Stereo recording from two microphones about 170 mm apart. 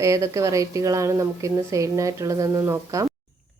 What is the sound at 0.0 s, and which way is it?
A woman's voice, 20° right (ahead or behind).